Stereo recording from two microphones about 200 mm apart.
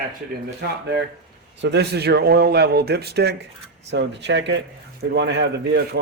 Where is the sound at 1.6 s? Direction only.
60° right (ahead or behind).